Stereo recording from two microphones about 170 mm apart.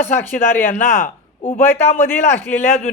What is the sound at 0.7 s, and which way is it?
Speech, 45° left (ahead or behind).